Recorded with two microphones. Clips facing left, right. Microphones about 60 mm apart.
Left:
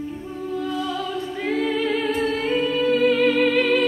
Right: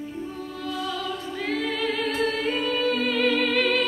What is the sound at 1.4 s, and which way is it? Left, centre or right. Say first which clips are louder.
Choir: left 4 dB; centre.